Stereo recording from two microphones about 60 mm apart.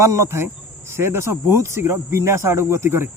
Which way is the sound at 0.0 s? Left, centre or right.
Right.